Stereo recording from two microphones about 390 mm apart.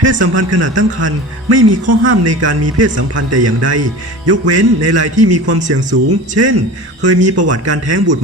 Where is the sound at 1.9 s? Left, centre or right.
Right.